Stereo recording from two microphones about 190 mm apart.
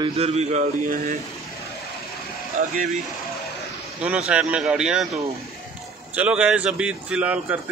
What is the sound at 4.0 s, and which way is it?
A man's voice, 5° right (ahead or behind).